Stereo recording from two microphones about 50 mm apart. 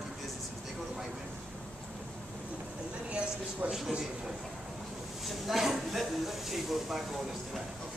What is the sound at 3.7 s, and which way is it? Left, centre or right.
Speech, centre.